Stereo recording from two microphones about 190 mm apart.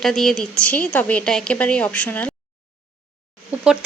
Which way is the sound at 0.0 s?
Centre (ahead or behind).